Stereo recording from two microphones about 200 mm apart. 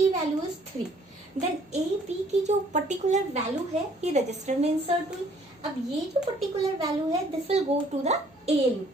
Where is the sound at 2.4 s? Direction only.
35° right (ahead or behind).